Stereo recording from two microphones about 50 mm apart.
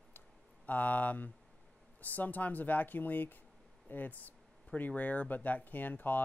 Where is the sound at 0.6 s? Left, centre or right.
Left.